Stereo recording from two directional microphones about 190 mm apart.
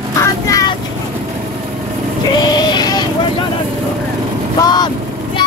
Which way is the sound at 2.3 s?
20° left (ahead or behind).